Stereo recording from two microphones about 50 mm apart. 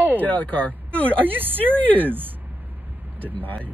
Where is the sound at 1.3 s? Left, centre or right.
Right.